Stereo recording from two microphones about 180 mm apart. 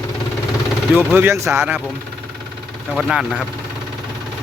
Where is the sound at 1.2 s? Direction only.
15° right (ahead or behind).